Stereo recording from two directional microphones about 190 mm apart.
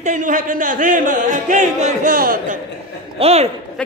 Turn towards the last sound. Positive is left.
turn(degrees=-35)  # may be behind; listen again after turning